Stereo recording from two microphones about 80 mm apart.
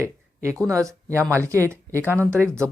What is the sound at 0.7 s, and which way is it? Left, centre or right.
Speech, right.